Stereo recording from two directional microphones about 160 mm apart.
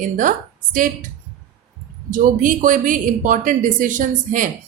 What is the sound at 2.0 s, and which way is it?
Speech, 55° right (ahead or behind).